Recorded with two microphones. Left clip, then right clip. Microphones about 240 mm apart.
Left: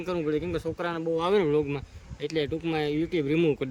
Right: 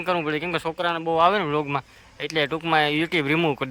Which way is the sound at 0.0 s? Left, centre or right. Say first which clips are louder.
Right 5 dB; centre.